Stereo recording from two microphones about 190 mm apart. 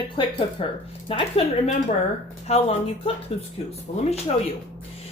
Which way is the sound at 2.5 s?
35° left (ahead or behind).